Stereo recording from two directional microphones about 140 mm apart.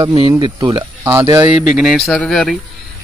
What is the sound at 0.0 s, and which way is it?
Speech, 40° right (ahead or behind).